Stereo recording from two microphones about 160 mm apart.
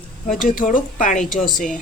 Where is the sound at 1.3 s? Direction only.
Centre (ahead or behind).